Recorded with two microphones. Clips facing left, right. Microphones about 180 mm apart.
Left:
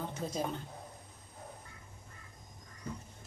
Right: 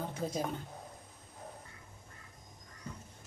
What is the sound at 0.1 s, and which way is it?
Speech, 10° right (ahead or behind).